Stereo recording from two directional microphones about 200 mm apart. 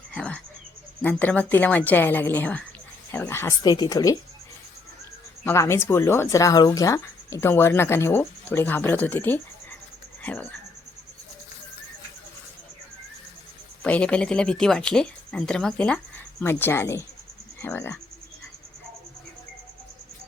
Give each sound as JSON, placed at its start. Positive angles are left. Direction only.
{"t": 0.1, "sound": "speech", "side_deg": 5}
{"t": 5.5, "sound": "speech", "side_deg": 15}
{"t": 13.8, "sound": "speech", "side_deg": 5}